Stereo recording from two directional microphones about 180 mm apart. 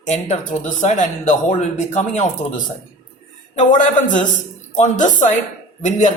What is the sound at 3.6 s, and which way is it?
Speech, 45° left (ahead or behind).